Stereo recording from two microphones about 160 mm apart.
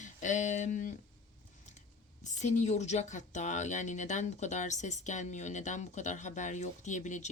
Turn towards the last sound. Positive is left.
turn(degrees=50)  # may be behind; listen again after turning